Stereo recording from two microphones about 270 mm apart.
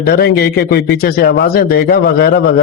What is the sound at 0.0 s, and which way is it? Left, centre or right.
A man's voice, left.